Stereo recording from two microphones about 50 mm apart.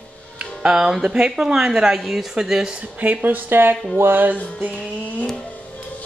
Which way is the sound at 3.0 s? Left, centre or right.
Right.